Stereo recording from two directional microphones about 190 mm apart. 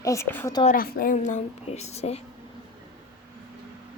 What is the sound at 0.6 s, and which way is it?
A woman's voice, 50° left (ahead or behind).